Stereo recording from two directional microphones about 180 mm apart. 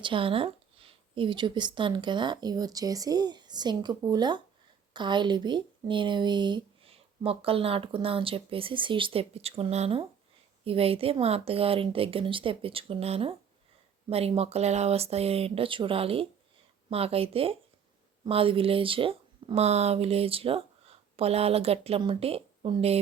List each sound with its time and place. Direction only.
0.0 s speech: 30° right (ahead or behind)